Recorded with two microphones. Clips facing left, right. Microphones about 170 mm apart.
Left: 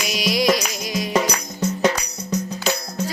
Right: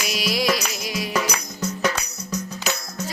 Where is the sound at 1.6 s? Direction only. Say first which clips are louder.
Left 5 dB; 30° left (ahead or behind).